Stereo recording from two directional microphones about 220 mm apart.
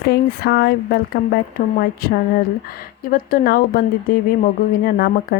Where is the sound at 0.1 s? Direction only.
45° left (ahead or behind).